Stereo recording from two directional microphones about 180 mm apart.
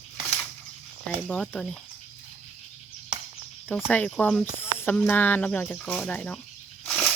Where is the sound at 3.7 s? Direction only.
10° left (ahead or behind).